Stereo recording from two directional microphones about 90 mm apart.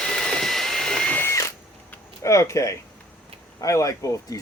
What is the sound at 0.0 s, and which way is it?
Vehicle, 5° left (ahead or behind).